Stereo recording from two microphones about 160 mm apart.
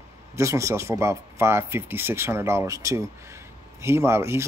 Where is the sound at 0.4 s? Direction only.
20° right (ahead or behind).